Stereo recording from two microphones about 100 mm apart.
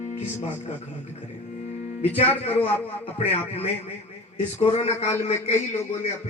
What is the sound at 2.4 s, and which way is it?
A man's voice, 90° left.